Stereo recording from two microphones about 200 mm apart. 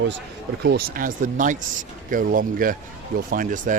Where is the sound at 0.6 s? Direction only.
50° right (ahead or behind).